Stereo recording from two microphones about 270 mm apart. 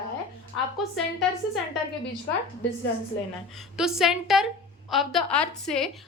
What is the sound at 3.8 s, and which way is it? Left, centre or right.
A woman's voice, centre.